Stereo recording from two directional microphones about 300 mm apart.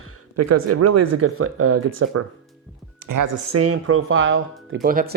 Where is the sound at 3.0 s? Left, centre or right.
Right.